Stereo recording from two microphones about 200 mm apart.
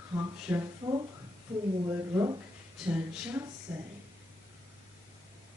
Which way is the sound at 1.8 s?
15° right (ahead or behind).